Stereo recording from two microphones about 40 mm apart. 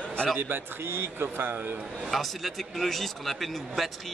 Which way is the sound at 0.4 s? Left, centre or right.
Right.